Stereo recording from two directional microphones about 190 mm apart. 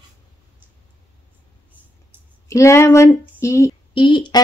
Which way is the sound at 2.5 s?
15° left (ahead or behind).